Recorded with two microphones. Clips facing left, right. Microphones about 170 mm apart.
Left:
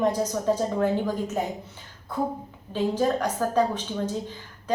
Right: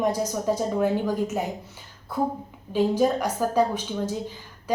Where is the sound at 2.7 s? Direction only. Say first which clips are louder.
Right 3 dB; 10° right (ahead or behind).